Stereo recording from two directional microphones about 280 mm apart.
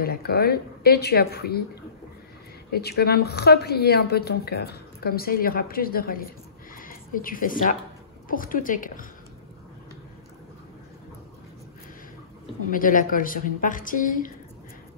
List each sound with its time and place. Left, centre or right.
0.0 s a woman's voice: left
2.7 s a woman's voice: left
6.7 s a sound: left
8.3 s a woman's voice: left
12.7 s a woman's voice: left